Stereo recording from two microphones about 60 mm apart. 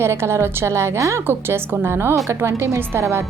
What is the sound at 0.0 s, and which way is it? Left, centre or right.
A woman's voice, right.